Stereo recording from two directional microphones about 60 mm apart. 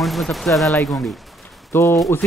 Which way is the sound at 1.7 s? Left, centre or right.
Left.